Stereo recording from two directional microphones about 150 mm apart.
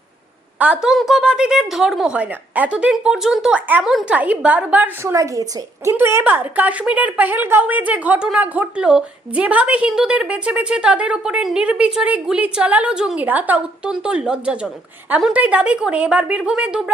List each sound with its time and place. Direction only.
0.6 s a woman's voice: 5° right (ahead or behind)
5.1 s a woman's voice: 20° right (ahead or behind)